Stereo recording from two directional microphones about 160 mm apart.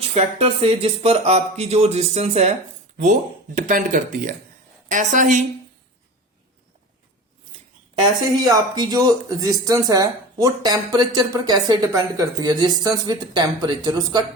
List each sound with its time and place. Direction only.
0.0 s speech: 40° right (ahead or behind)
8.4 s speech: 25° right (ahead or behind)